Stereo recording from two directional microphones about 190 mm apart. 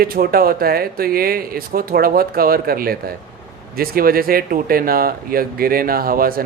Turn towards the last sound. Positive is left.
turn(degrees=-50)  # may be behind; listen again after turning